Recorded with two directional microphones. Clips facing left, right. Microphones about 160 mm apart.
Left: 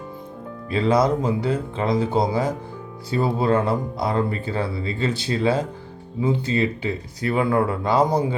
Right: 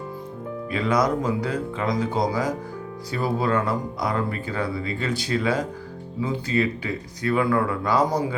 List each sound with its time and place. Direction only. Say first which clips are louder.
0.7 s speech: left 3 dB; 30° left (ahead or behind)